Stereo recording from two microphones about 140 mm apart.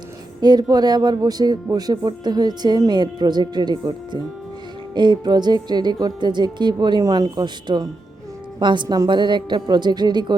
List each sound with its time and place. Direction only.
0.4 s speech: 30° right (ahead or behind)